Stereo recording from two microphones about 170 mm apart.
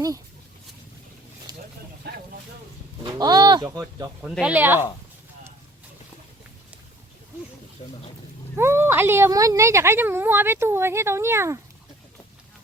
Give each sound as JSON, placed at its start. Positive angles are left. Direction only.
{"t": 1.5, "sound": "a sound", "side_deg": -25}
{"t": 3.0, "sound": "speech", "side_deg": -25}
{"t": 4.2, "sound": "speech", "side_deg": -5}
{"t": 7.8, "sound": "speech", "side_deg": 35}
{"t": 8.5, "sound": "speech", "side_deg": -15}